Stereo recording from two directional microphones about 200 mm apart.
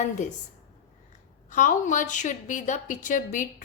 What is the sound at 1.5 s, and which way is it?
Speech, 40° left (ahead or behind).